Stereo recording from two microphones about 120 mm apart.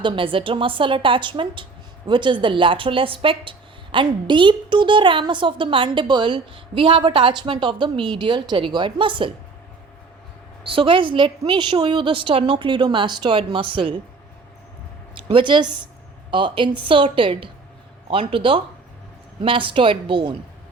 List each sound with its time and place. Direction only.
0.0 s a woman's voice: 45° right (ahead or behind)
10.7 s a woman's voice: 45° right (ahead or behind)
15.3 s a woman's voice: 40° right (ahead or behind)